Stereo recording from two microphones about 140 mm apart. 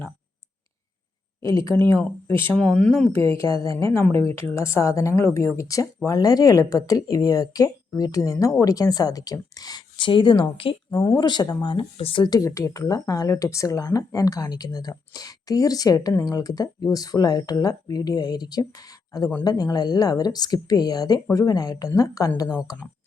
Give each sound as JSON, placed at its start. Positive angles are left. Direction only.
{"t": 1.4, "sound": "speech", "side_deg": 20}
{"t": 3.1, "sound": "speech", "side_deg": 20}
{"t": 12.2, "sound": "speech", "side_deg": 25}